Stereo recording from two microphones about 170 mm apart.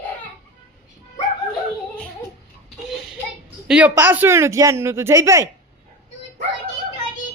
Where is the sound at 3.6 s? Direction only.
5° right (ahead or behind).